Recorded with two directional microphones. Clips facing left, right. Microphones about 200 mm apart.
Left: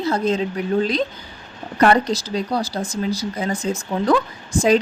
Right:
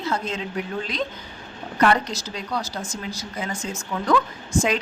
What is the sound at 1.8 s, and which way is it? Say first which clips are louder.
Speech: left 4 dB; 35° left (ahead or behind).